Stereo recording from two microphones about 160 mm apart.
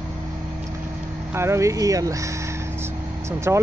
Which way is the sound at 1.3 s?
15° right (ahead or behind).